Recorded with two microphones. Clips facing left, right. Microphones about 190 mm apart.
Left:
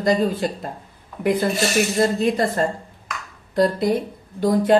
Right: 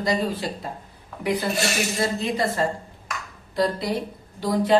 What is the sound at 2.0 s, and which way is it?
A woman's voice, 50° left (ahead or behind).